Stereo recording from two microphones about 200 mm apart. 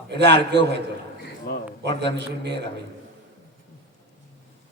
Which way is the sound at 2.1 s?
60° right (ahead or behind).